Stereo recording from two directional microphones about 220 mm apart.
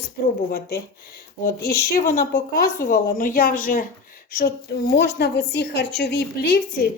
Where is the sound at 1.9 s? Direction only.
40° left (ahead or behind).